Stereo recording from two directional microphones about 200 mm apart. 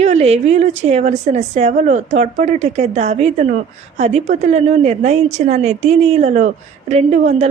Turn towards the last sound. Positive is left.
turn(degrees=-35)  # may be behind; listen again after turning